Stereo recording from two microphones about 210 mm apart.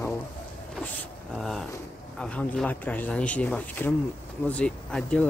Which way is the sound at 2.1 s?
5° left (ahead or behind).